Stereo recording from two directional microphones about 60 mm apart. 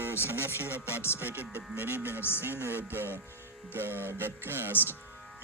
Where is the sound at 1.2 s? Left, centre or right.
Right.